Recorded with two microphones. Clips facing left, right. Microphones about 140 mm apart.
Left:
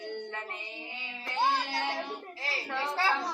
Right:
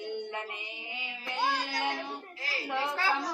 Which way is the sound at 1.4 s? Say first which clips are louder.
Left 2 dB; 25° left (ahead or behind).